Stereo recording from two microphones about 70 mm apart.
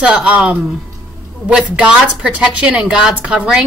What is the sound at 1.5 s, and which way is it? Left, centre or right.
A woman's voice, centre.